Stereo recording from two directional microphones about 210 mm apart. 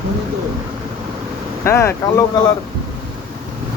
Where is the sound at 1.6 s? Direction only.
15° left (ahead or behind).